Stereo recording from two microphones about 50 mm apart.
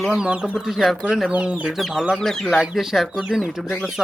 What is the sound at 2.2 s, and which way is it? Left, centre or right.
Speech, centre.